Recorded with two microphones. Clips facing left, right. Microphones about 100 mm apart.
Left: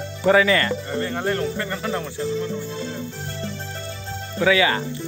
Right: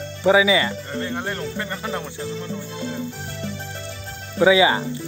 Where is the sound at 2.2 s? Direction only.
Centre (ahead or behind).